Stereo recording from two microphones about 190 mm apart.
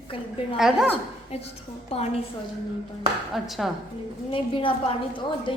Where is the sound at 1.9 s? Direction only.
35° left (ahead or behind).